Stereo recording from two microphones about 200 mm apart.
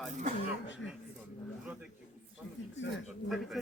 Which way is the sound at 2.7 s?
65° left (ahead or behind).